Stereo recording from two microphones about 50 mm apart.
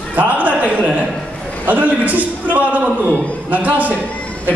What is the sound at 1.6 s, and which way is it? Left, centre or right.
A man's voice, right.